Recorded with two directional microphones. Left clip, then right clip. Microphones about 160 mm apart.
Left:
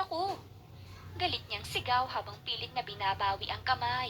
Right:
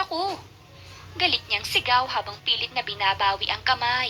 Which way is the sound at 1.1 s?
25° right (ahead or behind).